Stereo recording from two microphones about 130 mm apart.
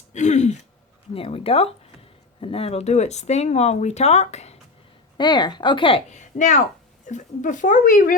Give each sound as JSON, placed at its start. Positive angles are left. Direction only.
{"t": 0.1, "sound": "a sound", "side_deg": 65}
{"t": 1.1, "sound": "speech", "side_deg": 45}
{"t": 5.1, "sound": "speech", "side_deg": 35}
{"t": 6.1, "sound": "speech", "side_deg": 65}